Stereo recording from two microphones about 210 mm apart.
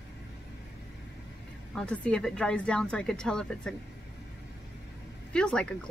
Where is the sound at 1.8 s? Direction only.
5° left (ahead or behind).